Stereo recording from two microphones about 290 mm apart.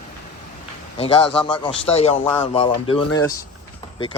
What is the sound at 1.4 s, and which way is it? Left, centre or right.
Speech, centre.